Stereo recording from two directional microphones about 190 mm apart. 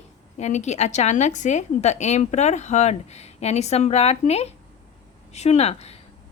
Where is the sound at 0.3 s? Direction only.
35° left (ahead or behind).